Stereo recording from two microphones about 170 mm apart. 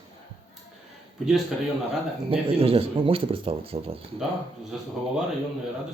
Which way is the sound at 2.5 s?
35° right (ahead or behind).